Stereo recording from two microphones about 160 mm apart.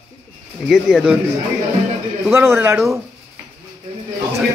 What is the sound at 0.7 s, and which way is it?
Speech, centre (ahead or behind).